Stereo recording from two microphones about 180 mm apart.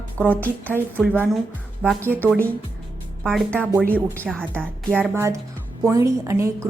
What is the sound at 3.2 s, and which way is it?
Speech, centre (ahead or behind).